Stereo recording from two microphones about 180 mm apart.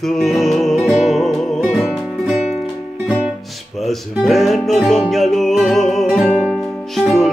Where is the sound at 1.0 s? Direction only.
Centre (ahead or behind).